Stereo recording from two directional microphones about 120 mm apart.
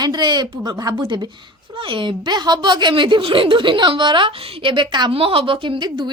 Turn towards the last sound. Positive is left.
turn(degrees=-35)  # may be behind; listen again after turning